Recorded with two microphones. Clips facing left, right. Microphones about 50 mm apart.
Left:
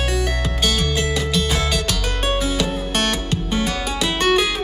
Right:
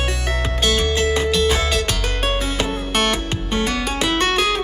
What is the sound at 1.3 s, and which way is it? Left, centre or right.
Music, centre.